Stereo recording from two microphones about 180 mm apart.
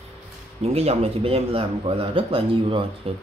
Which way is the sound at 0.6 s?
35° right (ahead or behind).